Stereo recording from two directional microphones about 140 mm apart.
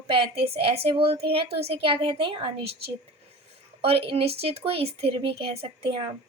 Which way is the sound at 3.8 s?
45° right (ahead or behind).